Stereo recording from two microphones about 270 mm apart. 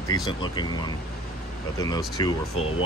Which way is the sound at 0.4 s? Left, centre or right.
Centre.